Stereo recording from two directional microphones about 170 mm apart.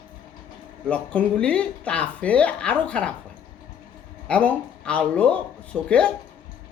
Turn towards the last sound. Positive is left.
turn(degrees=5)  # may be behind; listen again after turning